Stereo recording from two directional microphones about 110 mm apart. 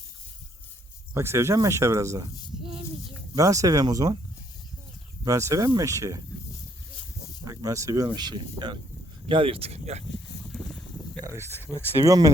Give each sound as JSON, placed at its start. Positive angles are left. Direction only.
{"t": 1.1, "sound": "speech", "side_deg": -25}
{"t": 3.3, "sound": "speech", "side_deg": -30}
{"t": 5.2, "sound": "speech", "side_deg": -30}
{"t": 7.4, "sound": "speech", "side_deg": -30}
{"t": 10.5, "sound": "a sound", "side_deg": 0}
{"t": 11.2, "sound": "a sound", "side_deg": -25}
{"t": 11.5, "sound": "speech", "side_deg": 20}
{"t": 11.9, "sound": "speech", "side_deg": -35}